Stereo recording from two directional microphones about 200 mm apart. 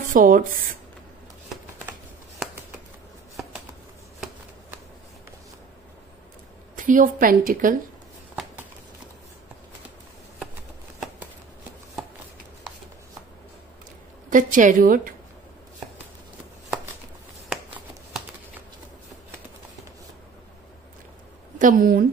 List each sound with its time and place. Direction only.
0.1 s speech: 45° right (ahead or behind)
1.5 s shuffling cards: centre (ahead or behind)
6.8 s a woman's voice: 40° right (ahead or behind)
14.3 s a woman's voice: 40° right (ahead or behind)
21.5 s a woman's voice: 45° right (ahead or behind)